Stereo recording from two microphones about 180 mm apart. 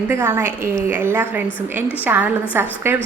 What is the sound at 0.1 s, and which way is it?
A woman's voice, 15° right (ahead or behind).